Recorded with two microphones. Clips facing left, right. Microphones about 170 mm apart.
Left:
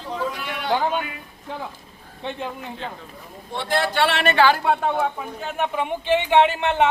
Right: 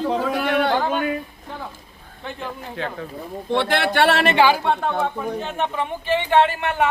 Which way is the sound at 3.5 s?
70° right (ahead or behind).